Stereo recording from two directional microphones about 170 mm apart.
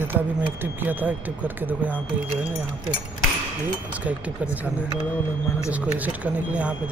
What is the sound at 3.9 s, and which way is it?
Speech, 10° right (ahead or behind).